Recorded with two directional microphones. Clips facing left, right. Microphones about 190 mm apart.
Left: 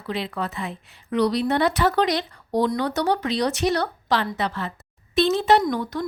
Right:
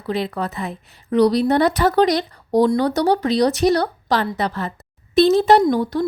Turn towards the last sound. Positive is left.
turn(degrees=-30)  # may be behind; listen again after turning